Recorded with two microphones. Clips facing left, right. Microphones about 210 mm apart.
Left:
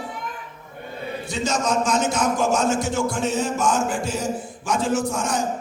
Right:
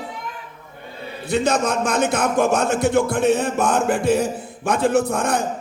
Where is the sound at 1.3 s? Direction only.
60° right (ahead or behind).